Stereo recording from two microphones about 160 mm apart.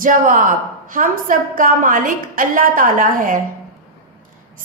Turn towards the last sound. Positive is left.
turn(degrees=-60)  # may be behind; listen again after turning